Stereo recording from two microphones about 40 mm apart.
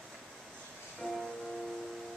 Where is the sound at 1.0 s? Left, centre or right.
Centre.